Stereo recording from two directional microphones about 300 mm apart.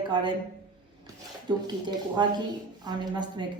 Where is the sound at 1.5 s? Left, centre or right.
Centre.